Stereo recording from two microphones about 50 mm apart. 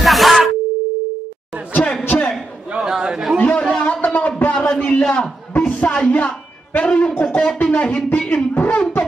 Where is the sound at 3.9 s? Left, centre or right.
Left.